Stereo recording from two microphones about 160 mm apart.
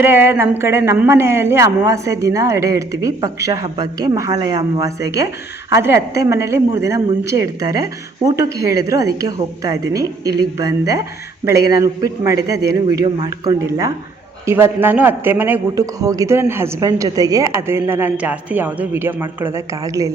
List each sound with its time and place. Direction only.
0.0 s a man's voice: 10° right (ahead or behind)